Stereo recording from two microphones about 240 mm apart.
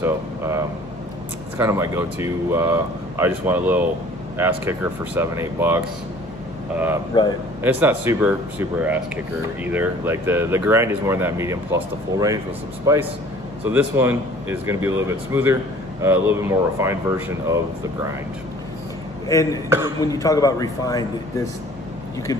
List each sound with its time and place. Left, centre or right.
0.0 s speech: centre
7.1 s a man's voice: centre
7.6 s speech: centre
19.2 s a man's voice: centre